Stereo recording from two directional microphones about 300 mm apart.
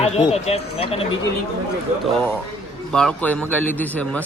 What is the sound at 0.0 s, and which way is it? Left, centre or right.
Speech, left.